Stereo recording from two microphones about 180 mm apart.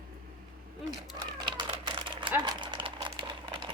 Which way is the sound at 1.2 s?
25° right (ahead or behind).